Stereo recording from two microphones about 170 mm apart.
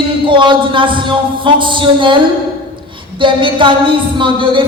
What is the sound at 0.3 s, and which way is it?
Speech, 30° right (ahead or behind).